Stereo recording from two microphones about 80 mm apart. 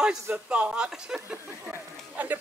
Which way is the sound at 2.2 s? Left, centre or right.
Right.